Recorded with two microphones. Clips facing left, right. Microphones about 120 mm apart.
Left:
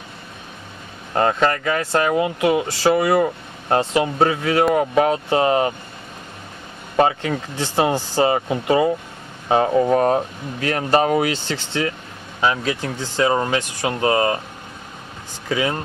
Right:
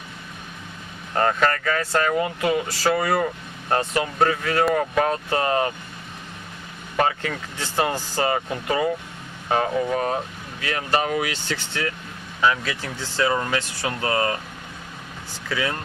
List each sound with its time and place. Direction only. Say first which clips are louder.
1.1 s speech: left 3 dB; 20° left (ahead or behind)
7.0 s speech: left 5 dB; 25° left (ahead or behind)
15.4 s speech: left 5 dB; 20° left (ahead or behind)